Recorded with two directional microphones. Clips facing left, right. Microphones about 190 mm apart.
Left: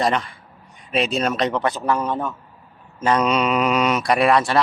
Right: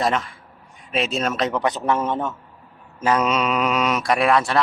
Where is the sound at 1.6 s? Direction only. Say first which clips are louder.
Even; 20° right (ahead or behind).